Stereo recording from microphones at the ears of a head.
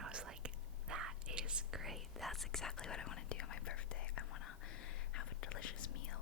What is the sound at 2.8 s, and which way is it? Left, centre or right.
Whispering, left.